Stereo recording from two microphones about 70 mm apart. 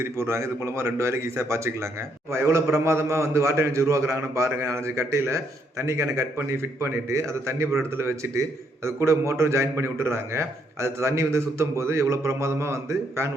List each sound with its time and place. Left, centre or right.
0.0 s speech: right